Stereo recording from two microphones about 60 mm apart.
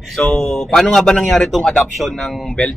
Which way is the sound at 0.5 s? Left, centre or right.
Centre.